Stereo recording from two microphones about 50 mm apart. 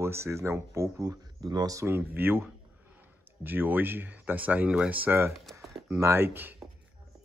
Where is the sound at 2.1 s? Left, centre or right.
Right.